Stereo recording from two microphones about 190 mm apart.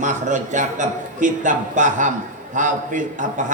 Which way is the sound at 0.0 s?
40° right (ahead or behind).